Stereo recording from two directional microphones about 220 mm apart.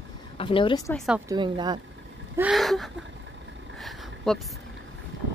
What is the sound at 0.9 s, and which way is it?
Speech, centre (ahead or behind).